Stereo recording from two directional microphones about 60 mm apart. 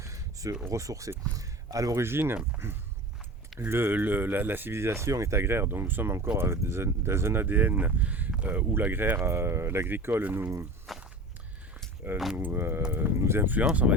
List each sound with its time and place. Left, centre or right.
0.0 s a sound: right
0.7 s speech: right
2.0 s speech: right
3.7 s speech: right
4.8 s speech: right
10.9 s walk: centre
12.1 s speech: centre
12.4 s speech: right